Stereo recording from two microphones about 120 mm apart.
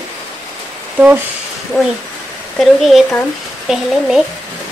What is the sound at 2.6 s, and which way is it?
Speech, centre (ahead or behind).